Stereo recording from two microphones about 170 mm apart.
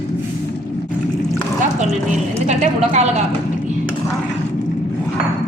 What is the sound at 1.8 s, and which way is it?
A woman's voice, 40° right (ahead or behind).